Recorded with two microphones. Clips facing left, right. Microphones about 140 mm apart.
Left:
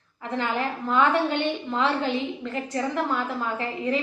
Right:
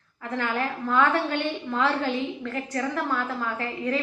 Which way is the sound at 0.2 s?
20° left (ahead or behind).